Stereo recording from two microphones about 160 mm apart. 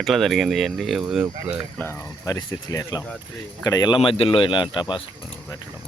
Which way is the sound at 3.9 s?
35° left (ahead or behind).